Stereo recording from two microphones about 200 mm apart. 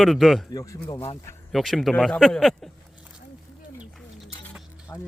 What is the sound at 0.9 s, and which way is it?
Speech, 30° left (ahead or behind).